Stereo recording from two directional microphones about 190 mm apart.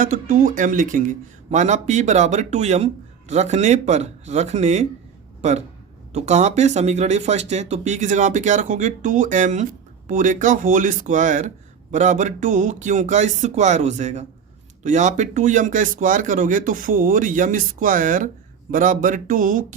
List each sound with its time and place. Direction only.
0.0 s speech: 45° right (ahead or behind)